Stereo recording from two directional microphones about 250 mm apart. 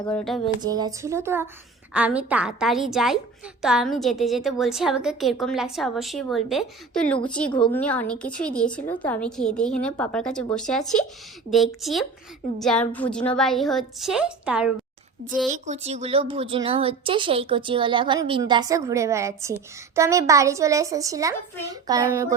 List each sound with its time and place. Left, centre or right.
0.1 s a woman's voice: centre
0.6 s a woman's voice: centre
15.4 s speech: right; by 22.4 s centre